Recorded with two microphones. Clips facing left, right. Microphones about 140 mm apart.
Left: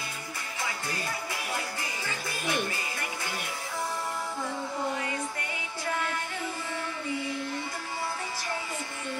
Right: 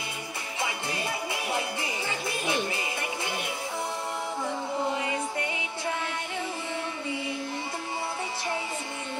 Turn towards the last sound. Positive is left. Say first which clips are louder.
# even
turn(degrees=-20)  # may be behind; listen again after turning